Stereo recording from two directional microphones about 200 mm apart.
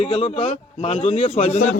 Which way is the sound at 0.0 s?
30° left (ahead or behind).